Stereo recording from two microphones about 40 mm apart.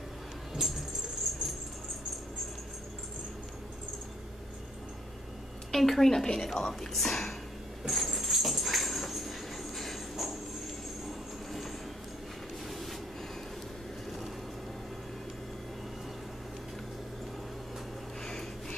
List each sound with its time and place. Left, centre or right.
0.6 s keys jangling: centre
1.3 s dog: centre
5.7 s a woman's voice: centre
7.8 s dog: centre
12.6 s train: centre
18.2 s a sound: centre